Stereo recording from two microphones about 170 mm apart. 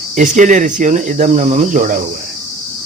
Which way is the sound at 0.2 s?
45° right (ahead or behind).